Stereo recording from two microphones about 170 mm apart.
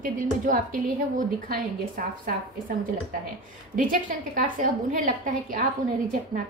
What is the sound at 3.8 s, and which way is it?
A woman's voice, 55° right (ahead or behind).